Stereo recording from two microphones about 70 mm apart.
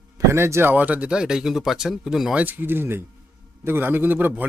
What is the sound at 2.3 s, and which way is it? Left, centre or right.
A man's voice, right.